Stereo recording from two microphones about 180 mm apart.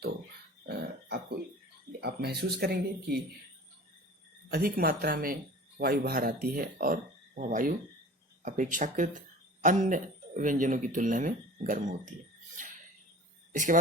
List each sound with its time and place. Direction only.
0.6 s cough: 65° right (ahead or behind)
1.9 s speech: 65° right (ahead or behind)
4.5 s a man's voice: 55° right (ahead or behind)
13.5 s speech: 45° right (ahead or behind)